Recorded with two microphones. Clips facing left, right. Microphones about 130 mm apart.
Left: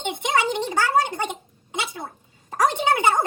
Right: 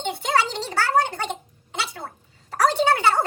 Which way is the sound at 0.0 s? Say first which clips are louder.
Even; 15° left (ahead or behind).